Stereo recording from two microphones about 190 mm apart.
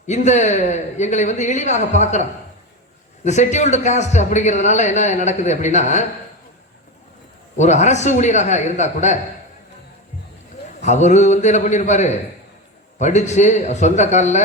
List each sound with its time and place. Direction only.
0.1 s a man's voice: 40° left (ahead or behind)
3.2 s a man's voice: 40° left (ahead or behind)
7.5 s a man's voice: 35° left (ahead or behind)
10.8 s a man's voice: 40° left (ahead or behind)